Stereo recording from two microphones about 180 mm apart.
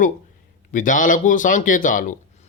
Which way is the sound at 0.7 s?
45° left (ahead or behind).